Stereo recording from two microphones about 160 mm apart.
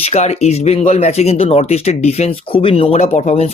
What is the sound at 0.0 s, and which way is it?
Speech, 40° left (ahead or behind).